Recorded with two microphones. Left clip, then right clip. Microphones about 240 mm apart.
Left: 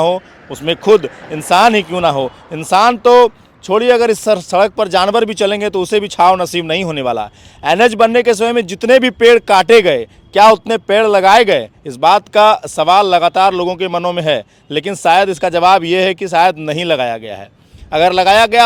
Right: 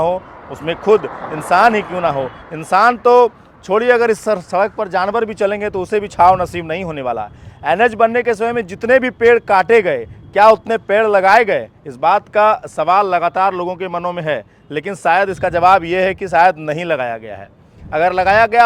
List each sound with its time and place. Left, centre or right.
0.0 s speech: left